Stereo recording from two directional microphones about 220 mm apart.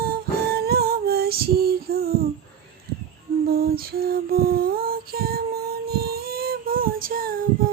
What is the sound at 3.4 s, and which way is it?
Lullaby, 45° right (ahead or behind).